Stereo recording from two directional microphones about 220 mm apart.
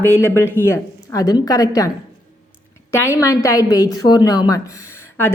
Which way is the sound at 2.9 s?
15° left (ahead or behind).